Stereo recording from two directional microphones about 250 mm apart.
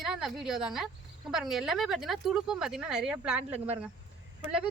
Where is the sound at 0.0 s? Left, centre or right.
Centre.